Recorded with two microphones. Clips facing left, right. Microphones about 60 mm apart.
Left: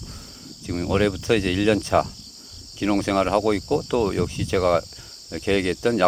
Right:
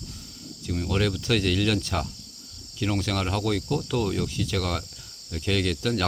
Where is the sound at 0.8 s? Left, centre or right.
Centre.